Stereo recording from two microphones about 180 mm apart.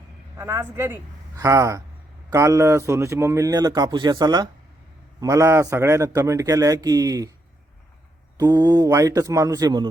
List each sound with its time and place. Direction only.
0.3 s a man's voice: 15° right (ahead or behind)
8.4 s speech: 20° right (ahead or behind)